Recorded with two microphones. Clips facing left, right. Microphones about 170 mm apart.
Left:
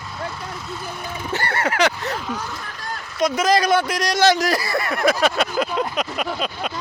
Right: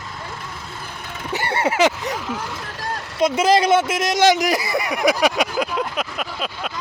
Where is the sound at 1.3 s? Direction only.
15° right (ahead or behind).